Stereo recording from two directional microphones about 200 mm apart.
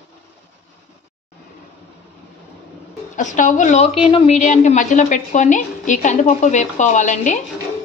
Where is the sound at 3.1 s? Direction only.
40° left (ahead or behind).